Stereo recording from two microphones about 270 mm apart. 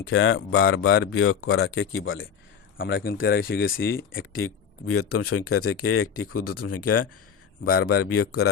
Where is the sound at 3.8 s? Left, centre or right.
Left.